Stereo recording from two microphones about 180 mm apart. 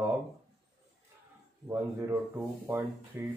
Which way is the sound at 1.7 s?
15° right (ahead or behind).